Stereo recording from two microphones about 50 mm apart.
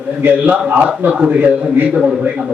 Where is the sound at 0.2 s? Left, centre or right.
Right.